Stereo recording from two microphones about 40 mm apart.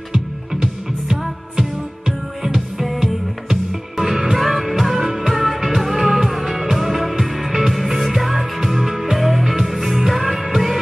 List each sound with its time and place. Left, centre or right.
0.1 s music: centre